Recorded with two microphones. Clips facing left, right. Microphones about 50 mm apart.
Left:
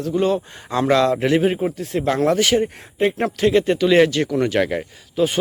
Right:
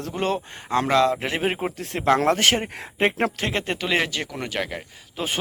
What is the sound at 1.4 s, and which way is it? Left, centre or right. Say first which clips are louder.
A man's voice: left 5 dB; right.